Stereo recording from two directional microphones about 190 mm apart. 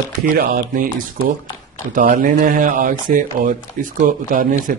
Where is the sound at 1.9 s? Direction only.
45° right (ahead or behind).